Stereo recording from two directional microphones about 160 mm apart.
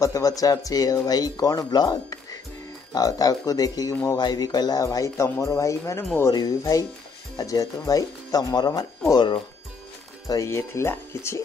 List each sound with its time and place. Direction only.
0.0 s speech: 20° left (ahead or behind)